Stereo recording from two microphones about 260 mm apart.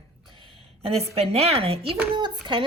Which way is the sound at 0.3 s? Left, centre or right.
Right.